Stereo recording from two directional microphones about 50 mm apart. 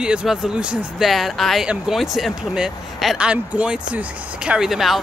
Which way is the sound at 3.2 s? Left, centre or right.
Right.